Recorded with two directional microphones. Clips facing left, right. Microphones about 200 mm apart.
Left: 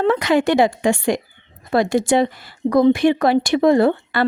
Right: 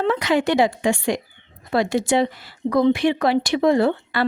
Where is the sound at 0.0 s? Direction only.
50° left (ahead or behind).